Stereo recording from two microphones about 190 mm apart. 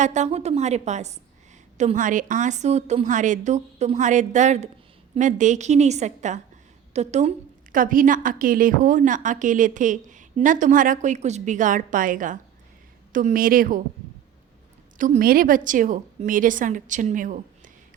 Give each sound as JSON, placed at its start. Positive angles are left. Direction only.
{"t": 0.0, "sound": "a woman's voice", "side_deg": -40}
{"t": 14.9, "sound": "a woman's voice", "side_deg": -45}